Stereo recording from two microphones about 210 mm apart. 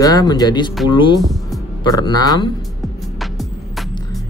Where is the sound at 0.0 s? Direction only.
20° left (ahead or behind).